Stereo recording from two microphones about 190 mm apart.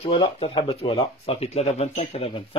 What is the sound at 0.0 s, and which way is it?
Speech, 30° left (ahead or behind).